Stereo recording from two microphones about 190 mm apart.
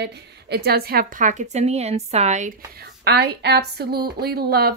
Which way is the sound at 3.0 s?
60° right (ahead or behind).